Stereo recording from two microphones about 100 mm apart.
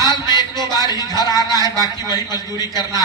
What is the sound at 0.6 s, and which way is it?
Speech, 35° right (ahead or behind).